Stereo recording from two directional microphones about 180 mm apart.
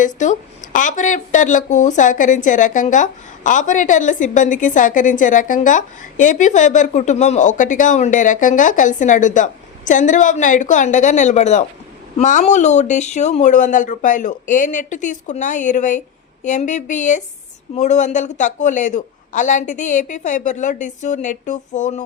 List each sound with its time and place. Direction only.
0.0 s speech: 45° left (ahead or behind)